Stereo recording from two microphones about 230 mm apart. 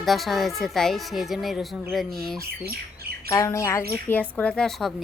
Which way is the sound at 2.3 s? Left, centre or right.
Right.